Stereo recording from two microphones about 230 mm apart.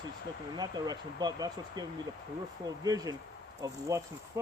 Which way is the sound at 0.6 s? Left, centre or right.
Centre.